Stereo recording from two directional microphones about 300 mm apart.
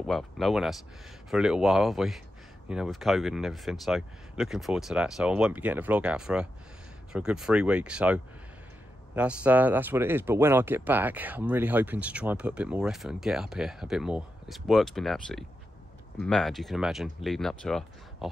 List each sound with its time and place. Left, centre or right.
0.0 s speech: centre